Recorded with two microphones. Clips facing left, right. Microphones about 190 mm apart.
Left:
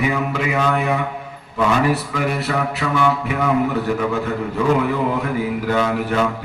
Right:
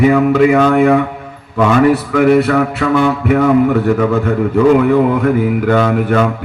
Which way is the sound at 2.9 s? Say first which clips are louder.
Right 8 dB; 55° right (ahead or behind).